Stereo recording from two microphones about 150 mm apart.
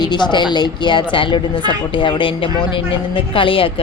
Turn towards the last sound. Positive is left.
turn(degrees=35)  # may be behind; listen again after turning